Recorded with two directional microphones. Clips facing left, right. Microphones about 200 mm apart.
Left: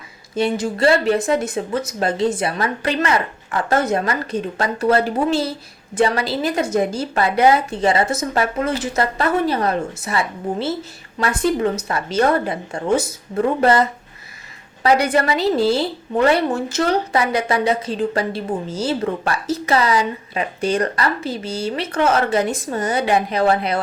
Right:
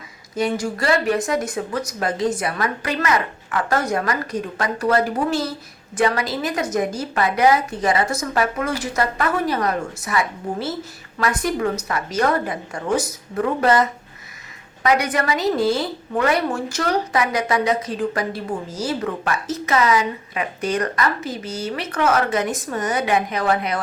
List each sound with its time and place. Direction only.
0.3 s a woman's voice: 25° left (ahead or behind)
14.8 s a woman's voice: 30° left (ahead or behind)